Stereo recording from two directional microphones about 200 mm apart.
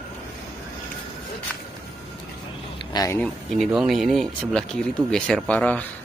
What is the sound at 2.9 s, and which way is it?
Speech, 20° left (ahead or behind).